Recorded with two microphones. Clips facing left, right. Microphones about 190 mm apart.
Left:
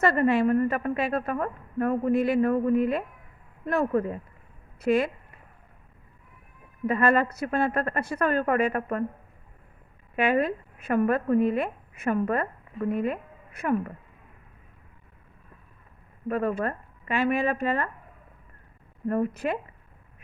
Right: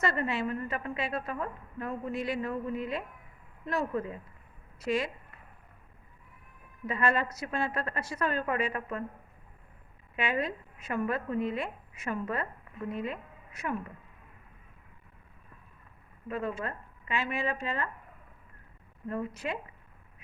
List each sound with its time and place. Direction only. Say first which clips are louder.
0.0 s a woman's voice: left 9 dB; 55° left (ahead or behind)
6.8 s a woman's voice: left 7 dB; 55° left (ahead or behind)
10.2 s speech: left 8 dB; 55° left (ahead or behind)
16.3 s a woman's voice: left 7 dB; 55° left (ahead or behind)
19.0 s a woman's voice: left 8 dB; 55° left (ahead or behind)